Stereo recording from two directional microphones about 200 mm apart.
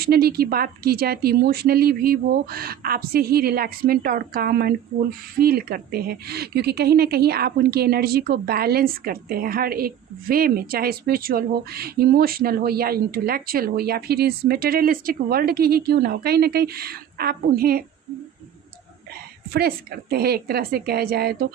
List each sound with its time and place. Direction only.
0.0 s a woman's voice: 50° right (ahead or behind)
19.5 s a woman's voice: 50° right (ahead or behind)